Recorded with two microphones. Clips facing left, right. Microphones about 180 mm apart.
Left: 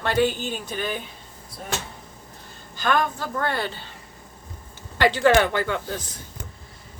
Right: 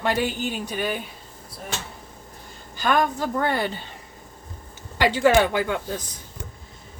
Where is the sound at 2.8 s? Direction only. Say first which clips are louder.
Right 2 dB; 15° right (ahead or behind).